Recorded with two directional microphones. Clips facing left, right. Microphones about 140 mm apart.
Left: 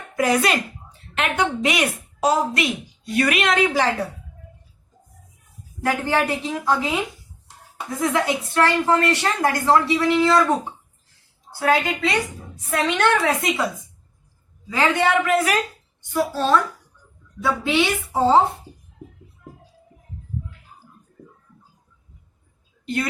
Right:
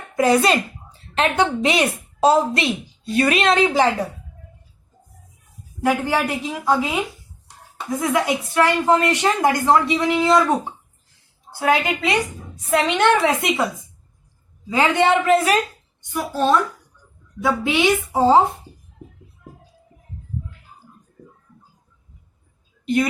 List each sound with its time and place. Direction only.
0.2 s a woman's voice: 30° right (ahead or behind)
5.8 s a woman's voice: 10° right (ahead or behind)
7.9 s a woman's voice: 10° right (ahead or behind)
11.6 s a woman's voice: 15° right (ahead or behind)
14.7 s a woman's voice: 25° right (ahead or behind)